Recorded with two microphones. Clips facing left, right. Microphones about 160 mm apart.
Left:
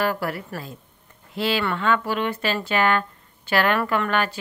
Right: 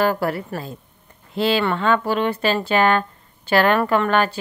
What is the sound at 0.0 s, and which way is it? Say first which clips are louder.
Speech: right 5 dB; 30° right (ahead or behind).